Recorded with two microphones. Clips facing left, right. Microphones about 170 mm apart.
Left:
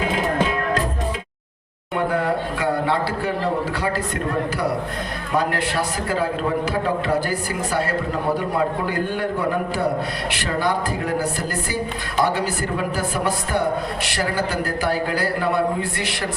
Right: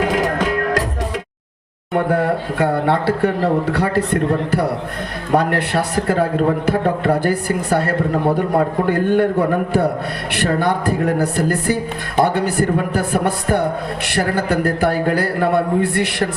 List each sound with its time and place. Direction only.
0.0 s music: 75° right (ahead or behind)
1.9 s speech: 55° right (ahead or behind)